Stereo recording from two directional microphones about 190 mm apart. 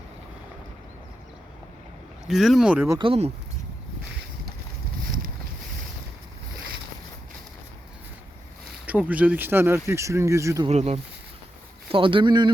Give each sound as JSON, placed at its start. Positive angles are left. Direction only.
{"t": 2.2, "sound": "speech", "side_deg": 0}
{"t": 3.0, "sound": "speech", "side_deg": -30}
{"t": 8.9, "sound": "speech", "side_deg": -5}
{"t": 10.7, "sound": "speech", "side_deg": -35}